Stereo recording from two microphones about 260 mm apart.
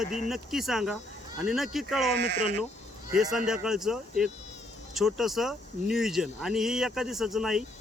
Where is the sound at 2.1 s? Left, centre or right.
Right.